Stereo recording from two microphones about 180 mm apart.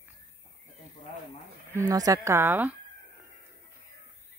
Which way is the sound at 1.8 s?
20° right (ahead or behind).